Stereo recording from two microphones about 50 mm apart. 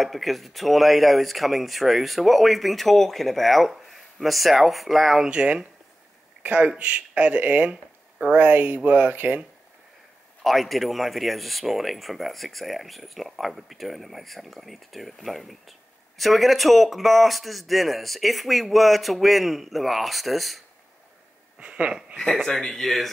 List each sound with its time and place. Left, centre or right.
0.0 s speech: centre
5.2 s speech: centre; by 9.4 s right
10.4 s speech: centre
21.5 s a sound: right
22.5 s speech: centre